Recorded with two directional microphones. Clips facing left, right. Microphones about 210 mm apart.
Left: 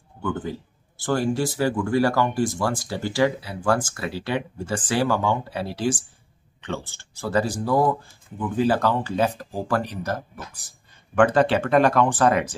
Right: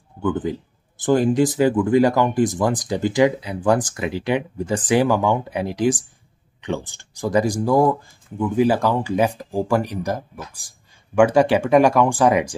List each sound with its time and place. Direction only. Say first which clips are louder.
0.2 s speech: right 6 dB; 15° right (ahead or behind)